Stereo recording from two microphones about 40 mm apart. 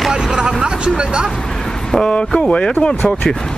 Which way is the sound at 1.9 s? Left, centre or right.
Centre.